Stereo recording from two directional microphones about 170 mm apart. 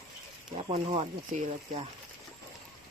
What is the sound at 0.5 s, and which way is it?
Speech, 35° right (ahead or behind).